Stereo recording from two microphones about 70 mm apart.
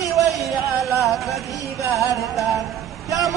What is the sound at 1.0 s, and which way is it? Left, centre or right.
Music, centre.